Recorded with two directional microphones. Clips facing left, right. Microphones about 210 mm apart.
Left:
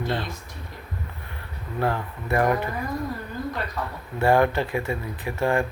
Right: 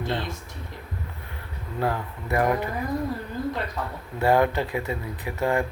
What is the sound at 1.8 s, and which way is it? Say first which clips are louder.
Speech: left 1 dB; 15° right (ahead or behind).